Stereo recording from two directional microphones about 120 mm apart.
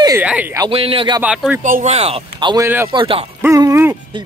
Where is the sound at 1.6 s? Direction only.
65° right (ahead or behind).